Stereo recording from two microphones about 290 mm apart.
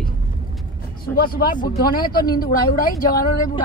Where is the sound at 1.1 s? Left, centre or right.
Left.